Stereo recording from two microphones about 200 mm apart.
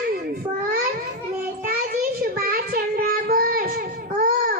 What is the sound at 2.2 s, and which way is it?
Child singing, 50° right (ahead or behind).